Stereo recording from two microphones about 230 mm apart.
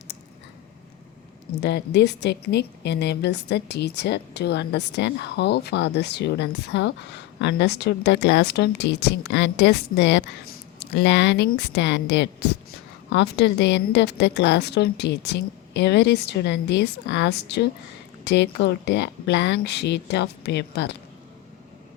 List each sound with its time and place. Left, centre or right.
1.6 s a woman's voice: left